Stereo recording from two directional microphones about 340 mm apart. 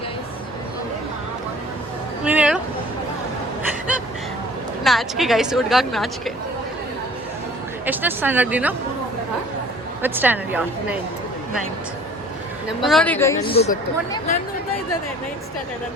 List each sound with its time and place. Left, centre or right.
2.2 s a sound: centre
4.8 s a woman's voice: centre
7.9 s a woman's voice: centre
10.0 s a woman's voice: centre
12.8 s a woman's voice: centre